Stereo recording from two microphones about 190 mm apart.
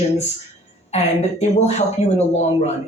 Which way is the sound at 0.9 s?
35° left (ahead or behind).